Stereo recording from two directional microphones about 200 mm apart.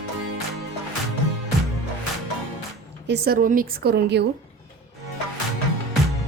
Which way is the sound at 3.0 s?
55° right (ahead or behind).